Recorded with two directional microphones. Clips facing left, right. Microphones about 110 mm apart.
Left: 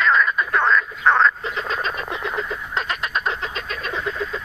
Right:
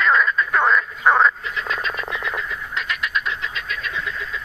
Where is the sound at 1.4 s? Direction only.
35° left (ahead or behind).